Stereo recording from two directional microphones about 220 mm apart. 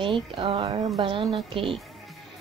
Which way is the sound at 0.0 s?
25° right (ahead or behind).